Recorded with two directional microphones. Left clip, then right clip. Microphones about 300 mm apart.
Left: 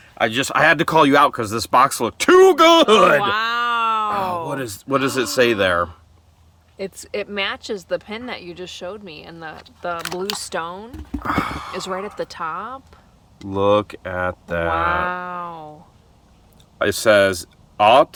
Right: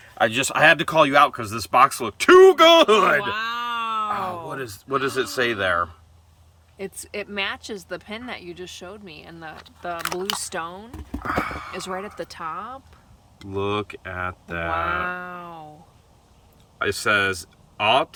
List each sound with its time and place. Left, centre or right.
0.2 s speech: centre; by 3.2 s left
3.2 s a sound: centre
4.1 s speech: left
6.7 s speech: centre
11.2 s horse: left
11.8 s speech: centre
13.5 s speech: left
14.8 s speech: centre
16.7 s speech: left